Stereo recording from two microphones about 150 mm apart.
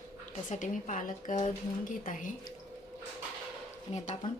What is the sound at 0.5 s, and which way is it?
Speech, 60° left (ahead or behind).